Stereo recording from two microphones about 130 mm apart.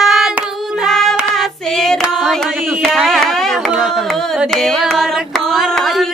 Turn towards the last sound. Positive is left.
turn(degrees=0)  # may be behind; listen again after turning